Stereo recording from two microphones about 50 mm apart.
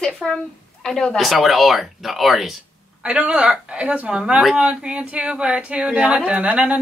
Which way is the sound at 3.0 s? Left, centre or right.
Centre.